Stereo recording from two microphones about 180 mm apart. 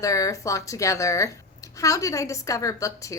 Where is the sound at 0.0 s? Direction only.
20° left (ahead or behind).